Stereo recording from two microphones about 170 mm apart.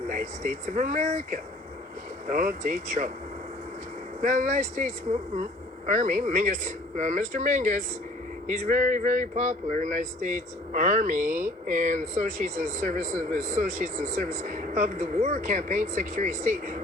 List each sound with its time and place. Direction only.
0.1 s speech: 50° right (ahead or behind)
4.2 s speech: 50° right (ahead or behind)